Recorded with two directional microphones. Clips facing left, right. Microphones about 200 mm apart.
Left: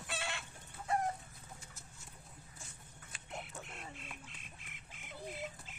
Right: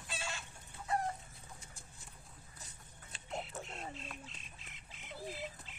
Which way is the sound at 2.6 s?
30° right (ahead or behind).